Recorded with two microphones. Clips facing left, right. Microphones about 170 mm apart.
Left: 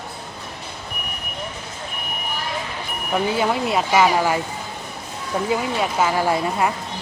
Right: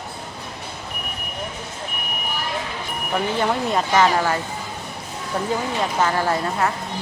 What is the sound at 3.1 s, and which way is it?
Speech, 5° left (ahead or behind).